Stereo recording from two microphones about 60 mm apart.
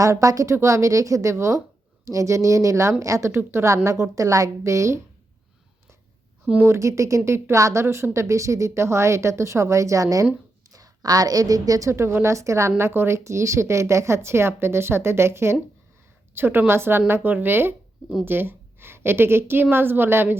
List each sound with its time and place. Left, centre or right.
0.0 s speech: right
0.5 s a woman's voice: right
6.6 s a woman's voice: right
7.3 s a woman's voice: right
10.7 s a woman's voice: right
11.9 s a woman's voice: right